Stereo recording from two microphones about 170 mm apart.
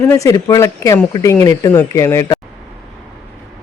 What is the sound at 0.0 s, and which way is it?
Speech, 15° left (ahead or behind).